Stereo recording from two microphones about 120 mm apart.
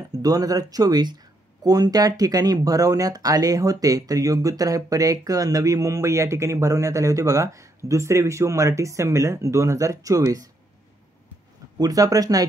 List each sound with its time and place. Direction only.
0.1 s speech: 30° right (ahead or behind)
11.8 s speech: 30° right (ahead or behind)